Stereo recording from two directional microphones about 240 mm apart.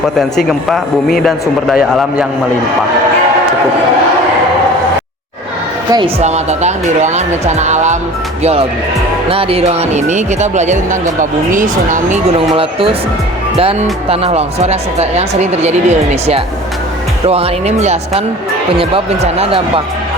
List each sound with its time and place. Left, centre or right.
0.2 s a man's voice: centre
5.9 s speech: right
9.3 s speech: right
14.1 s speech: right